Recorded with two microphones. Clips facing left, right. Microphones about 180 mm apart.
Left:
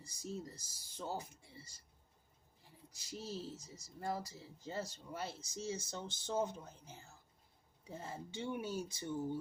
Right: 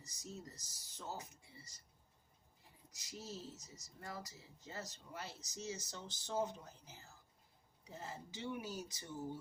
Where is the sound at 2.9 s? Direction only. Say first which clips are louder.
Left 4 dB; 30° left (ahead or behind).